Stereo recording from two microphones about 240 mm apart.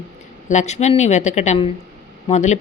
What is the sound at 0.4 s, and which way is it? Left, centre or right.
A woman's voice, left.